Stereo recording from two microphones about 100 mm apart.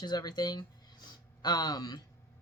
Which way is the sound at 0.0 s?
45° left (ahead or behind).